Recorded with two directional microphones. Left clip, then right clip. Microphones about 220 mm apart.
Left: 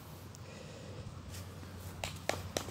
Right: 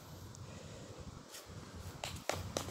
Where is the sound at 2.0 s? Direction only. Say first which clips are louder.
Left 2 dB; 50° left (ahead or behind).